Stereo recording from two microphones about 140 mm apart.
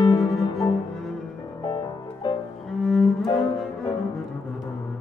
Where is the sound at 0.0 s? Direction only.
30° left (ahead or behind).